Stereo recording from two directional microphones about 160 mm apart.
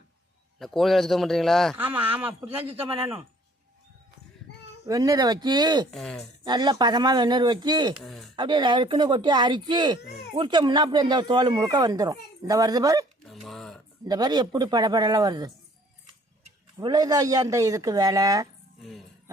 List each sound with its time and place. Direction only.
0.6 s speech: centre (ahead or behind)
1.7 s speech: 10° right (ahead or behind)
4.9 s speech: 20° right (ahead or behind)
5.9 s speech: centre (ahead or behind)
6.4 s speech: 25° right (ahead or behind)
8.0 s speech: centre (ahead or behind)
8.4 s speech: 30° right (ahead or behind)
13.2 s a sound: centre (ahead or behind)
14.0 s speech: 25° right (ahead or behind)
16.7 s speech: 25° right (ahead or behind)
18.8 s speech: centre (ahead or behind)